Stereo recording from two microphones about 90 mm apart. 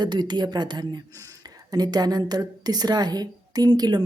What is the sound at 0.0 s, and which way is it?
A woman's voice, 55° right (ahead or behind).